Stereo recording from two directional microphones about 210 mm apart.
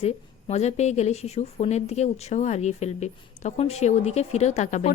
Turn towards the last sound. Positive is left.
turn(degrees=35)  # may be behind; listen again after turning